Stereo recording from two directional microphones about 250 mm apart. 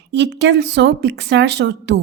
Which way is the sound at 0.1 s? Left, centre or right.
Right.